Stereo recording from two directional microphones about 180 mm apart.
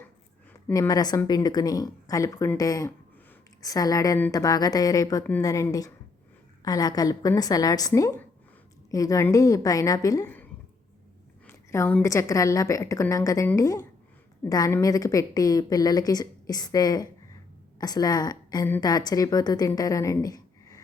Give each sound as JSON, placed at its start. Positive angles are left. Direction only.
{"t": 0.7, "sound": "a woman's voice", "side_deg": 20}
{"t": 11.4, "sound": "a woman's voice", "side_deg": 15}